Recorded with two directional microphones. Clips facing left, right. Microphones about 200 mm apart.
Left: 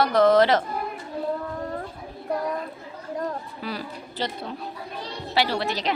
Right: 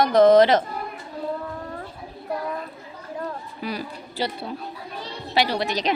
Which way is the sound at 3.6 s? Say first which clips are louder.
Right 4 dB; 15° right (ahead or behind).